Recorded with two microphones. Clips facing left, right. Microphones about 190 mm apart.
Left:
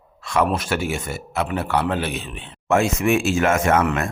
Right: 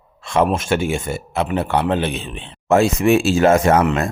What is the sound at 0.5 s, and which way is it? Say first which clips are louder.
A man's voice: right 4 dB; 25° right (ahead or behind).